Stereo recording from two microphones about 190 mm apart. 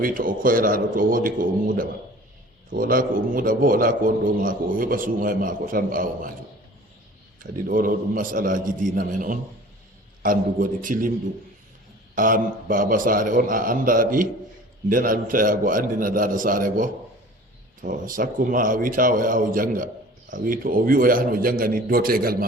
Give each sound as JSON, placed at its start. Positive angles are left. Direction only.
{"t": 0.0, "sound": "a man's voice", "side_deg": -45}
{"t": 7.5, "sound": "a man's voice", "side_deg": -45}
{"t": 12.1, "sound": "a man's voice", "side_deg": -45}